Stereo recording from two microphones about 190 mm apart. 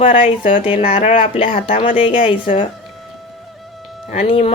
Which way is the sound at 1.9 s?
30° left (ahead or behind).